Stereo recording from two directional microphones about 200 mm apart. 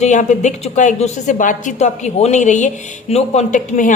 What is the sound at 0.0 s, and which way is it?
A woman's voice, 35° left (ahead or behind).